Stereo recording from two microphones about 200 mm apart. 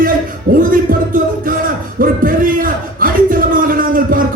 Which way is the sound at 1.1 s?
45° right (ahead or behind).